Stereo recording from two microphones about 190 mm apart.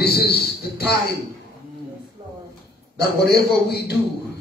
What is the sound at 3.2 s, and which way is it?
Speech, 55° left (ahead or behind).